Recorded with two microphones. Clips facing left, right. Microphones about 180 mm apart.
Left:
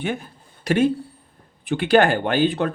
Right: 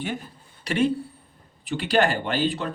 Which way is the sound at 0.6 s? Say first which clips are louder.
Left 4 dB; 50° left (ahead or behind).